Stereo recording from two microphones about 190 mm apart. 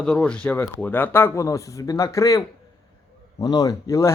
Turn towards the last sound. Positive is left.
turn(degrees=15)  # may be behind; listen again after turning